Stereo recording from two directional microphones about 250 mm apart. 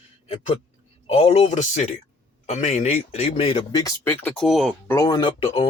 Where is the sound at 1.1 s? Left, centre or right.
Left.